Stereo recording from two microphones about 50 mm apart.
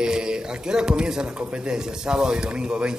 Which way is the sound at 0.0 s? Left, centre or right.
Centre.